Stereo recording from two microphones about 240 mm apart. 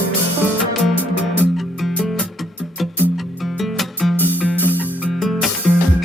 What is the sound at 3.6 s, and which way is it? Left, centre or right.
Music, centre.